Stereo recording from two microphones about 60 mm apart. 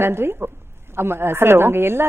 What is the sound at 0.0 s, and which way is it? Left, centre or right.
A woman's voice, right.